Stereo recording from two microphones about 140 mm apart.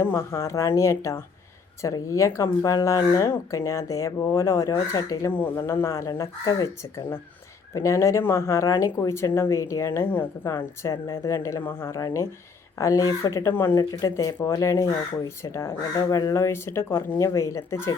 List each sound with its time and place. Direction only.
0.0 s speech: 20° left (ahead or behind)
13.7 s speech: 25° left (ahead or behind)
16.0 s speech: 30° left (ahead or behind)